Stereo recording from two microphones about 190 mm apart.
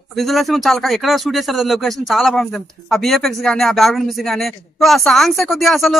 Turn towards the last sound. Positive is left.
turn(degrees=0)  # may be behind; listen again after turning